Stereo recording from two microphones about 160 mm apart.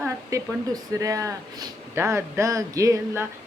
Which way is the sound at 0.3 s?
20° right (ahead or behind).